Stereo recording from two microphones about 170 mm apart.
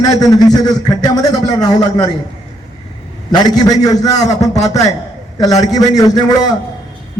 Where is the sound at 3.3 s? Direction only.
25° left (ahead or behind).